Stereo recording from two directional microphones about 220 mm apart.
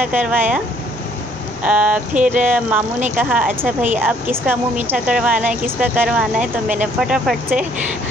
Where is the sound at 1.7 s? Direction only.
5° right (ahead or behind).